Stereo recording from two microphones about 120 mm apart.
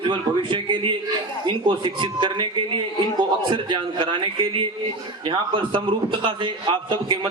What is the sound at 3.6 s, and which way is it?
A man's voice, 40° right (ahead or behind).